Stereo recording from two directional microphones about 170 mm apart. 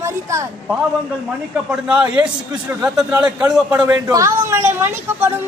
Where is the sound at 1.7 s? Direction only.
5° right (ahead or behind).